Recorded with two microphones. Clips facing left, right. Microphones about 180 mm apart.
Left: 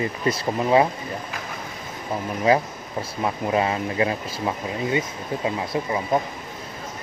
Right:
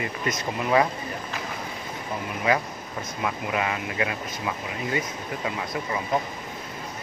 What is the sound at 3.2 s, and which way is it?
Speech, 30° left (ahead or behind).